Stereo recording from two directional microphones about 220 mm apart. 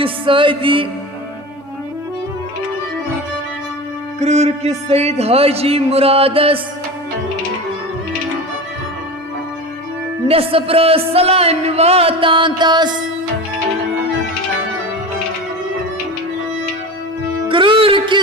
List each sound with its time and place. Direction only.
0.0 s speech: 25° right (ahead or behind)
4.2 s speech: 30° right (ahead or behind)
10.2 s speech: 25° right (ahead or behind)
17.5 s music: 25° right (ahead or behind)